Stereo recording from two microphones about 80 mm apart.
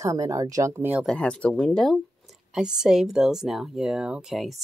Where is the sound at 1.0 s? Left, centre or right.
Centre.